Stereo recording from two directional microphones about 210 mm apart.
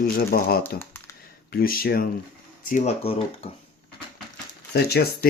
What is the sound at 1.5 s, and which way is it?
Speech, 45° left (ahead or behind).